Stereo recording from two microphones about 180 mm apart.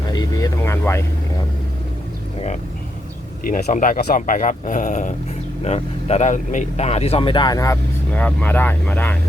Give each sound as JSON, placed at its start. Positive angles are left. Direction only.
{"t": 0.1, "sound": "vehicle", "side_deg": 20}
{"t": 3.4, "sound": "speech", "side_deg": 50}